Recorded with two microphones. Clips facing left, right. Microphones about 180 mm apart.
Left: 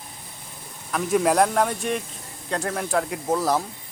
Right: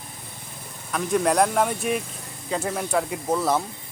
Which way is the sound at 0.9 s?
Centre (ahead or behind).